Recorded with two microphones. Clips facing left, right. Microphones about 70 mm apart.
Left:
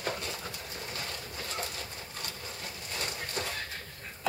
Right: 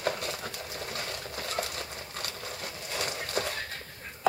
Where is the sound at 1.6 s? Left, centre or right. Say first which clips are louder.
Right 5 dB; right.